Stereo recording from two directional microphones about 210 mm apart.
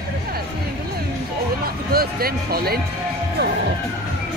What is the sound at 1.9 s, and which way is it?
Speech, 45° right (ahead or behind).